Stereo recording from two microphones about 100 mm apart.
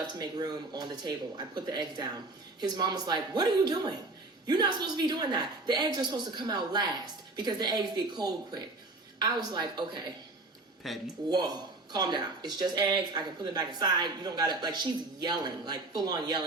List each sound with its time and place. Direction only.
0.0 s speech: 45° right (ahead or behind)
10.8 s speech: centre (ahead or behind)
11.3 s speech: 40° right (ahead or behind)